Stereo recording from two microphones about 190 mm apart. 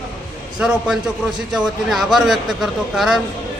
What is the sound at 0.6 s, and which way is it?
A man's voice, 5° right (ahead or behind).